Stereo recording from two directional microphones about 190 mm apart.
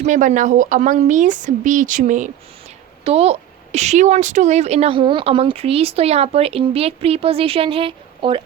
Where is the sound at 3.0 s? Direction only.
30° right (ahead or behind).